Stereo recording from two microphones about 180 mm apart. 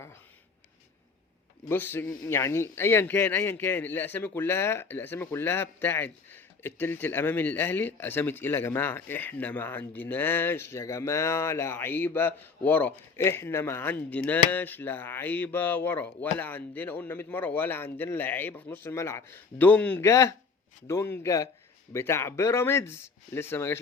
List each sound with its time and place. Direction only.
1.7 s speech: 10° left (ahead or behind)